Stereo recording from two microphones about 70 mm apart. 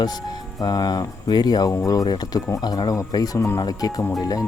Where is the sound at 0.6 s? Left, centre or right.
Left.